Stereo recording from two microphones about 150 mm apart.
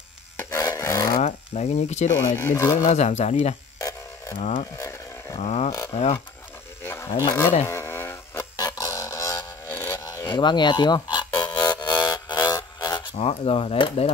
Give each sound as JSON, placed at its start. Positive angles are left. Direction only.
{"t": 0.4, "sound": "rub", "side_deg": 20}
{"t": 1.2, "sound": "speech", "side_deg": 45}
{"t": 2.1, "sound": "speech", "side_deg": 15}
{"t": 2.8, "sound": "speech", "side_deg": 45}
{"t": 4.7, "sound": "a sound", "side_deg": 20}
{"t": 5.4, "sound": "speech", "side_deg": 45}
{"t": 6.8, "sound": "a sound", "side_deg": 15}
{"t": 10.3, "sound": "speech", "side_deg": 30}
{"t": 11.3, "sound": "music", "side_deg": 25}
{"t": 11.8, "sound": "a sound", "side_deg": 25}
{"t": 13.1, "sound": "speech", "side_deg": 45}